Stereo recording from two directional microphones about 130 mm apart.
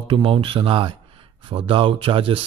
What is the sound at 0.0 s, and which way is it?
Speech, 45° right (ahead or behind).